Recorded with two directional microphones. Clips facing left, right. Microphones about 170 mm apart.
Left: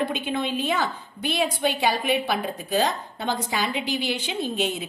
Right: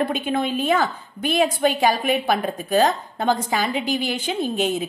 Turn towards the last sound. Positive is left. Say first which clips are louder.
# right 4 dB
turn(degrees=-50)  # may be behind; listen again after turning